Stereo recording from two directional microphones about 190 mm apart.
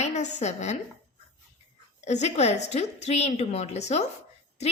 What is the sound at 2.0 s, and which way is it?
A woman's voice, 35° left (ahead or behind).